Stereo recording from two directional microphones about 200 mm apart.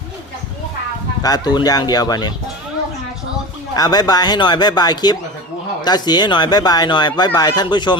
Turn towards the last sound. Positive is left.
turn(degrees=20)  # may be behind; listen again after turning